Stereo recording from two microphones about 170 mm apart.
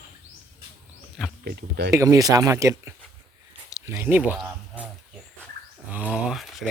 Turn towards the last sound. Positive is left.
turn(degrees=0)  # may be behind; listen again after turning